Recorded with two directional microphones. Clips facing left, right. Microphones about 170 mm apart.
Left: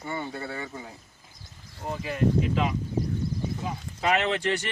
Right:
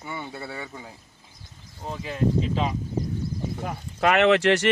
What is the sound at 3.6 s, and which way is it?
Speech, 65° right (ahead or behind).